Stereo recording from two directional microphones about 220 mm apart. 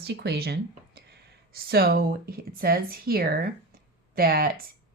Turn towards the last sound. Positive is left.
turn(degrees=-45)  # may be behind; listen again after turning